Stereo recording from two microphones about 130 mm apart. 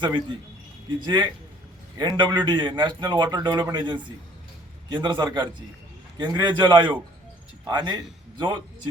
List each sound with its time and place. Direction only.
0.0 s a man's voice: 35° right (ahead or behind)